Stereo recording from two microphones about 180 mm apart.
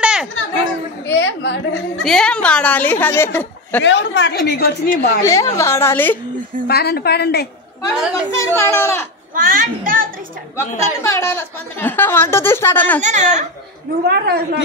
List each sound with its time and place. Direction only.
0.0 s chatter: 5° right (ahead or behind)
1.0 s a woman's voice: 85° left
2.0 s a woman's voice: 5° left (ahead or behind)
3.8 s a woman's voice: 80° left; by 5.2 s 55° left (ahead or behind)
5.2 s a woman's voice: 15° left (ahead or behind)
6.7 s a woman's voice: 60° left (ahead or behind)
8.1 s a woman's voice: 15° left (ahead or behind)
9.3 s a child's voice: 50° right (ahead or behind)
10.8 s a woman's voice: 15° left (ahead or behind)
13.0 s speech: 40° right (ahead or behind)
14.0 s a woman's voice: 65° right (ahead or behind)